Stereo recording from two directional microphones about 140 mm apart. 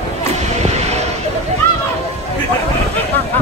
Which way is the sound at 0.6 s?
50° right (ahead or behind).